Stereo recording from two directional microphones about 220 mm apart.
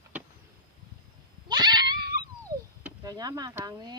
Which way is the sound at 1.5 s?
20° right (ahead or behind).